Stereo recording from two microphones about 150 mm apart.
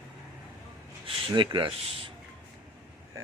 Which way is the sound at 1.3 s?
30° right (ahead or behind).